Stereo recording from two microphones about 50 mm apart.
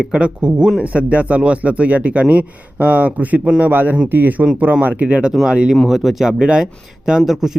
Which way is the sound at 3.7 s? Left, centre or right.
Right.